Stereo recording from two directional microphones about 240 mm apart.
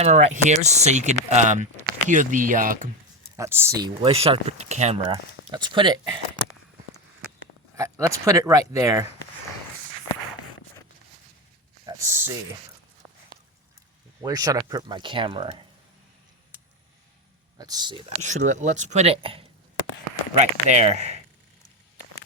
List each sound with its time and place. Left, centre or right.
0.0 s speech: right
3.3 s speech: centre
7.8 s speech: centre
11.9 s speech: centre
14.2 s speech: centre
17.6 s speech: centre
18.2 s speech: right